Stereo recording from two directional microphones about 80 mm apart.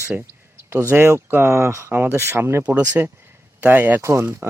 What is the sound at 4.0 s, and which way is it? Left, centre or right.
Speech, right.